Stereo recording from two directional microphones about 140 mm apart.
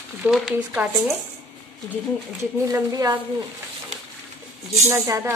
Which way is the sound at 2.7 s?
25° right (ahead or behind).